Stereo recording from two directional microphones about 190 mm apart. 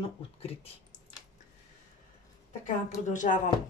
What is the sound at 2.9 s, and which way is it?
Speech, 40° left (ahead or behind).